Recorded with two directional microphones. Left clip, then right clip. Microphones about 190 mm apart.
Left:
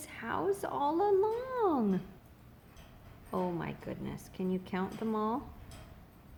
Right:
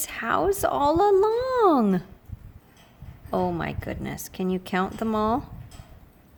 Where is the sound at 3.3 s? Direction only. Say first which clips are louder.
Right 10 dB; 55° right (ahead or behind).